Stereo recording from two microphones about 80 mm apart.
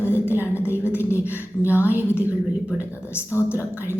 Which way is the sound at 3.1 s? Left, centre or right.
Left.